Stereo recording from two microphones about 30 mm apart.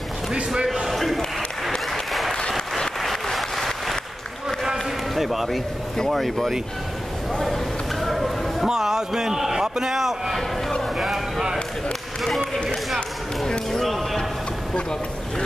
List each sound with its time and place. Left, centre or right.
0.9 s a sound: centre
1.9 s applause: centre
4.7 s music: centre
6.0 s speech: centre
7.4 s a sound: centre
8.6 s a man's voice: centre
13.5 s speech: centre
14.7 s speech: left